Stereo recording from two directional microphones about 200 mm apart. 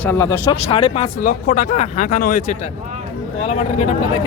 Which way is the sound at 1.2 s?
40° left (ahead or behind).